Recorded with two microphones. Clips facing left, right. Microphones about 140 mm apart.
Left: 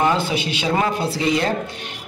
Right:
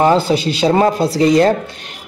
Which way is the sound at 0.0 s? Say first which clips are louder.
Right 7 dB; 35° right (ahead or behind).